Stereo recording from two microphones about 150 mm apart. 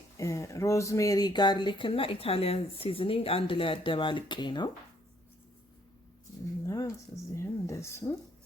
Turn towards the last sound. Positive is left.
turn(degrees=20)  # may be behind; listen again after turning